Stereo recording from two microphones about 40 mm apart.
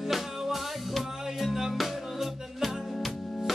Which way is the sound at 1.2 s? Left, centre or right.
Centre.